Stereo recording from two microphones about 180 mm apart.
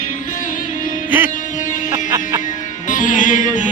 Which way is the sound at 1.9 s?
15° right (ahead or behind).